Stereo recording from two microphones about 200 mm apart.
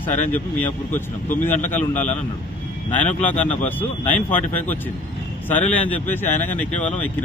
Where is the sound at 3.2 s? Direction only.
10° left (ahead or behind).